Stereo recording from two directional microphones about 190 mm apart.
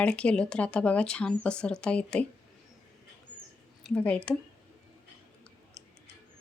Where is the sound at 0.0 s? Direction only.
5° left (ahead or behind).